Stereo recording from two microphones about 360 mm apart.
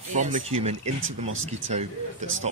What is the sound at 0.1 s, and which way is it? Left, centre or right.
Speech, right.